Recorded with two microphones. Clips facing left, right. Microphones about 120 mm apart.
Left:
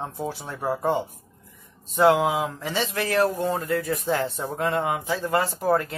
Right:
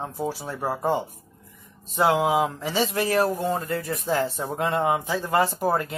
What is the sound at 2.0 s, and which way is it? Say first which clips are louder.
Speech: left 3 dB; 15° right (ahead or behind).